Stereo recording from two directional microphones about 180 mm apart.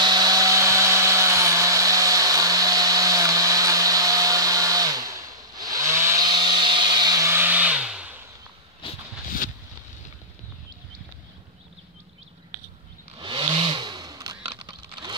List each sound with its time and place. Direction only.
0.0 s vacuum cleaner: 20° right (ahead or behind); by 8.2 s 5° right (ahead or behind)
13.2 s vehicle: 25° right (ahead or behind)